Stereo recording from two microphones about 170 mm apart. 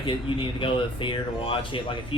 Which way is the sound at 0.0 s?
30° left (ahead or behind).